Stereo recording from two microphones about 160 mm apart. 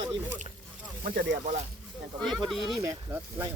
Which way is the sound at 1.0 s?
70° right (ahead or behind).